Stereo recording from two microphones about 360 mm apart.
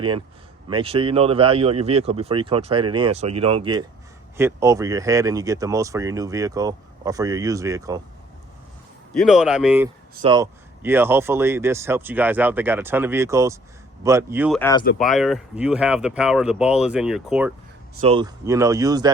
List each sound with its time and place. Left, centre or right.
0.7 s speech: centre
9.1 s speech: centre
14.6 s speech: centre
18.0 s speech: centre